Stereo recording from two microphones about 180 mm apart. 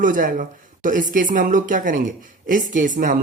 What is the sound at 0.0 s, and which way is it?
Speech, 50° right (ahead or behind).